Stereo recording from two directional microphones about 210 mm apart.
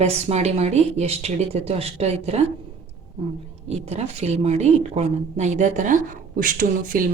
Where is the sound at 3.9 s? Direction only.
30° right (ahead or behind).